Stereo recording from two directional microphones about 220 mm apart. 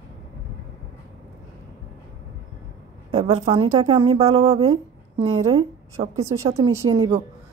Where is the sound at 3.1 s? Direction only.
30° right (ahead or behind).